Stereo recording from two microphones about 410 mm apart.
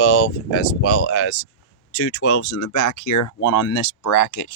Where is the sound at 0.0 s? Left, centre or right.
Left.